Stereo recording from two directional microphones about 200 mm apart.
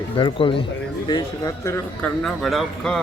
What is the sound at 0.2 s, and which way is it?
Speech, 25° left (ahead or behind).